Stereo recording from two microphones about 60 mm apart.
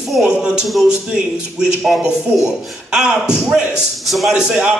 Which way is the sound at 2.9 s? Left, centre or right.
Centre.